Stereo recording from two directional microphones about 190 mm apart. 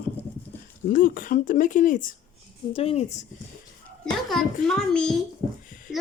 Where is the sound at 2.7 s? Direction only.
30° left (ahead or behind).